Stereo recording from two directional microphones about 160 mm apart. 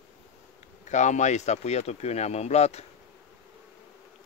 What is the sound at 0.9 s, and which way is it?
Speech, 50° left (ahead or behind).